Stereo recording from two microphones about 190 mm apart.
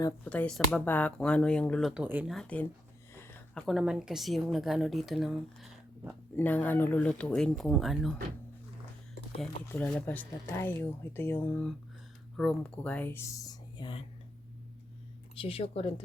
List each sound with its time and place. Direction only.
0.3 s speech: 5° left (ahead or behind)
2.3 s speech: 5° left (ahead or behind)
3.2 s a sound: 15° left (ahead or behind)
3.7 s speech: 5° right (ahead or behind)
9.7 s speech: 5° left (ahead or behind); by 14.0 s 25° left (ahead or behind)
15.4 s speech: 30° left (ahead or behind)